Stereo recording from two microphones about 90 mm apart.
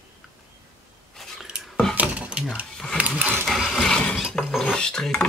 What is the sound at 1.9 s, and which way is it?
Cutlery, 15° right (ahead or behind).